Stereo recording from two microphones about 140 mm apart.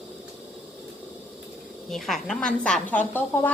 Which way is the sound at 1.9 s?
Centre (ahead or behind).